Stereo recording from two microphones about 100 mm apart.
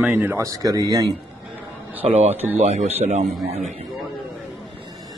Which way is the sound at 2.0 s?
90° right.